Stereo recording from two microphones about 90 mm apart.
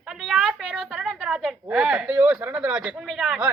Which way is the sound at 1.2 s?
10° right (ahead or behind).